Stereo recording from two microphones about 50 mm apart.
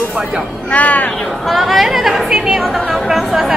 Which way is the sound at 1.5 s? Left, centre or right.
Centre.